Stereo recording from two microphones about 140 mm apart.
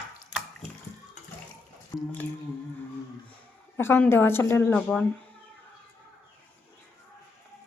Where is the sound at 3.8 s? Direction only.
15° left (ahead or behind).